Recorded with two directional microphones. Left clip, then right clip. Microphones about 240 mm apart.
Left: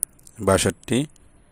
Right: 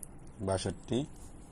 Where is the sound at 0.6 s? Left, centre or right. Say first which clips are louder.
Left 12 dB; left.